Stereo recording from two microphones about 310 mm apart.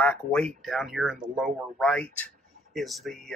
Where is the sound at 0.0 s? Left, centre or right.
Centre.